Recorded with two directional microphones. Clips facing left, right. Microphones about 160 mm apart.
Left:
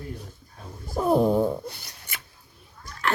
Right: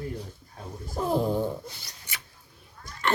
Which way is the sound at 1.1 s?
60° left (ahead or behind).